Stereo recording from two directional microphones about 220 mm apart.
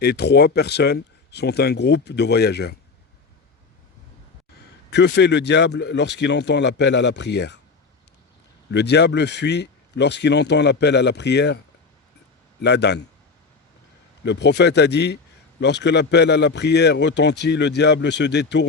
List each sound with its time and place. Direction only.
0.0 s a man's voice: 50° left (ahead or behind)
4.9 s a man's voice: 50° left (ahead or behind)
8.7 s a man's voice: 50° left (ahead or behind)
12.6 s a man's voice: 50° left (ahead or behind)
14.3 s a man's voice: 50° left (ahead or behind)